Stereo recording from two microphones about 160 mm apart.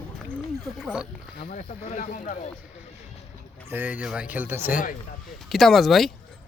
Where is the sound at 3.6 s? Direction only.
10° right (ahead or behind).